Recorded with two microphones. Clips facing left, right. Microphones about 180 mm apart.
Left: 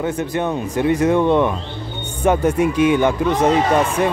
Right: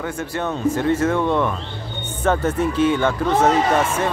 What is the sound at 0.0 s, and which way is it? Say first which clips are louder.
Speech: left 4 dB; 20° left (ahead or behind).